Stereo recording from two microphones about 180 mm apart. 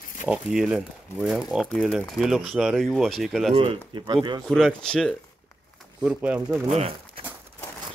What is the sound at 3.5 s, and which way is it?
Speech, 30° right (ahead or behind).